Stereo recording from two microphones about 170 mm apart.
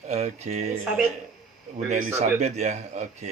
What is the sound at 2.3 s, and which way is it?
Speech, 40° right (ahead or behind).